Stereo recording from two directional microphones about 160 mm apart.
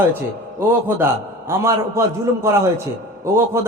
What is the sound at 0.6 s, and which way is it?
A man's voice, 15° right (ahead or behind).